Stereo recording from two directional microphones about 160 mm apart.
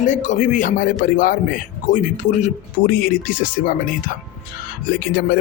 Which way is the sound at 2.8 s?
60° left (ahead or behind).